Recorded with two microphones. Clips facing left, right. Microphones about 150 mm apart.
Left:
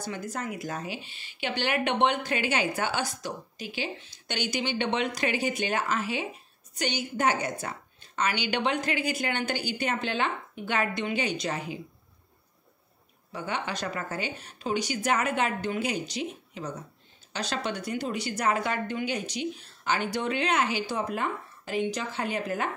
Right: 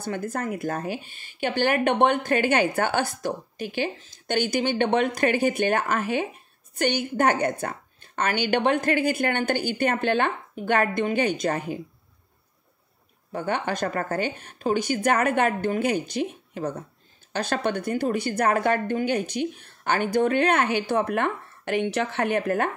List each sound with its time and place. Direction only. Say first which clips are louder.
0.0 s a woman's voice: right 5 dB; 55° right (ahead or behind)
13.3 s a woman's voice: right 6 dB; 50° right (ahead or behind)